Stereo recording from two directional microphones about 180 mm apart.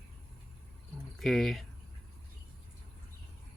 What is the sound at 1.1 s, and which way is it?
Speech, centre (ahead or behind).